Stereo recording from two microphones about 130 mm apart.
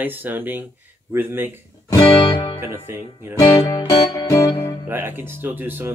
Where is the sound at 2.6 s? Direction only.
20° right (ahead or behind).